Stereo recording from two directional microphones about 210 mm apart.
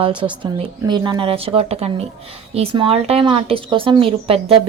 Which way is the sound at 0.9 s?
20° right (ahead or behind).